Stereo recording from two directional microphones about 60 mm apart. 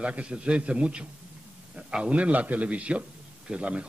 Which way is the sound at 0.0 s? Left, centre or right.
Centre.